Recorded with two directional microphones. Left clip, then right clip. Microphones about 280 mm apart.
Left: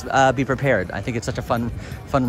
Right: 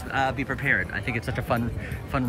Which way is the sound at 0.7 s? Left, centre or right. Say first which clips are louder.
Left 1 dB; centre.